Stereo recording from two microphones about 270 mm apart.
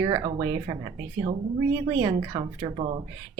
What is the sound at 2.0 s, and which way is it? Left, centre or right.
Speech, centre.